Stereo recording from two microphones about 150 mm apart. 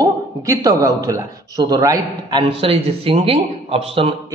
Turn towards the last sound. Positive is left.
turn(degrees=-40)  # may be behind; listen again after turning